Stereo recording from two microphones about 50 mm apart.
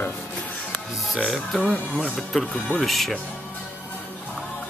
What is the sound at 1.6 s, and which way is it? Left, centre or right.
Speech, centre.